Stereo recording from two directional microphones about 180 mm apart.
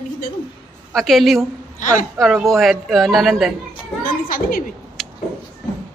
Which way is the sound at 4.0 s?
50° left (ahead or behind).